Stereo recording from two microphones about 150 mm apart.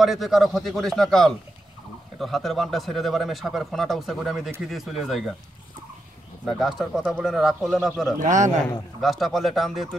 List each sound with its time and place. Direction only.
0.0 s speech: centre (ahead or behind)
6.4 s speech: centre (ahead or behind)
8.2 s a man's voice: 55° right (ahead or behind)
9.0 s speech: centre (ahead or behind)